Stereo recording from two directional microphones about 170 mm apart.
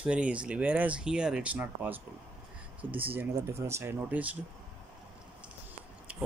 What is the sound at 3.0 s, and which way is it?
Speech, 10° right (ahead or behind).